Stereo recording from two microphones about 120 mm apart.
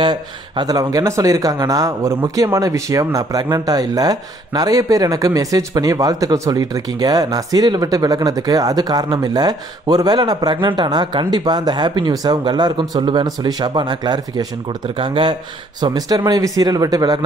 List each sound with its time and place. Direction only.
0.0 s speech: 40° right (ahead or behind)